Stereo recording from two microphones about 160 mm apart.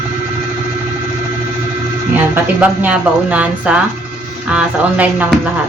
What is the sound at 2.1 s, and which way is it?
Speech, 10° right (ahead or behind).